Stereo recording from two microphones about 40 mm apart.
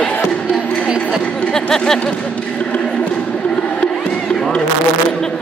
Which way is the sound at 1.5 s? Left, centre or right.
Centre.